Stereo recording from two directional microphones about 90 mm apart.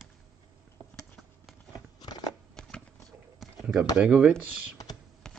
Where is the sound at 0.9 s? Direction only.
10° left (ahead or behind).